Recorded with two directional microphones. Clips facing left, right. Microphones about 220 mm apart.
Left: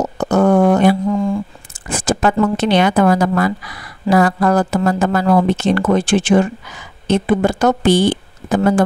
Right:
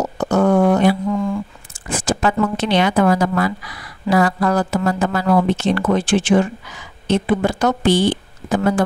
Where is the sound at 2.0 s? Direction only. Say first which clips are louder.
Left 3 dB; 50° left (ahead or behind).